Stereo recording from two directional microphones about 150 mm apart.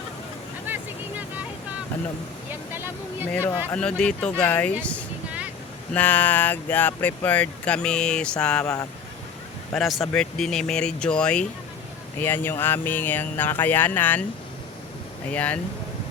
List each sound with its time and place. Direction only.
0.7 s vehicle: 10° right (ahead or behind)
2.7 s speech: 15° right (ahead or behind)
3.7 s speech: 5° left (ahead or behind)
8.6 s speech: 25° left (ahead or behind)
9.7 s speech: centre (ahead or behind)
15.3 s speech: 10° left (ahead or behind)